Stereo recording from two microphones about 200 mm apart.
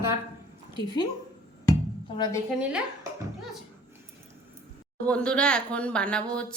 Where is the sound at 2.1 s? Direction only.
20° left (ahead or behind).